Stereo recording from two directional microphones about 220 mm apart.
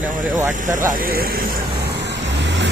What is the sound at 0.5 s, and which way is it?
Speech, 35° right (ahead or behind).